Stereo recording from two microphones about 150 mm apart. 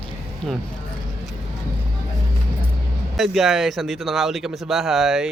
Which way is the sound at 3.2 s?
Centre (ahead or behind).